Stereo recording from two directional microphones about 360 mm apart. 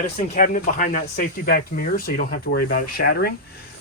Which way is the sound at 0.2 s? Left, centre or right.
Left.